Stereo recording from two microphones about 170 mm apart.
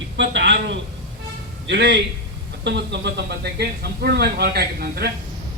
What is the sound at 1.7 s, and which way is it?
A man's voice, 90° right.